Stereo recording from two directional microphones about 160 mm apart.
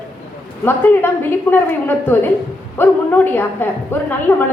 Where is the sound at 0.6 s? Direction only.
15° left (ahead or behind).